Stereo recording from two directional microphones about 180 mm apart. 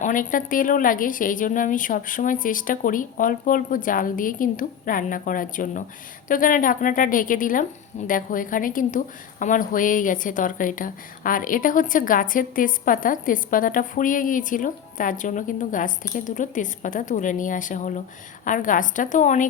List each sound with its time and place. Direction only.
0.0 s a woman's voice: 45° left (ahead or behind)